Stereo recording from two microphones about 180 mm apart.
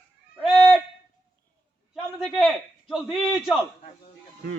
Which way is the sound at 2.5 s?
Centre (ahead or behind).